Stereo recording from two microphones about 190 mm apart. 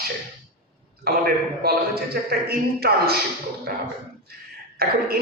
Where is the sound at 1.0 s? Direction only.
55° right (ahead or behind).